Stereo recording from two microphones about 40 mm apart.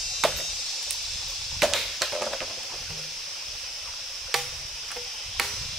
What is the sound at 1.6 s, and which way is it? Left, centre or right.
Chop, centre.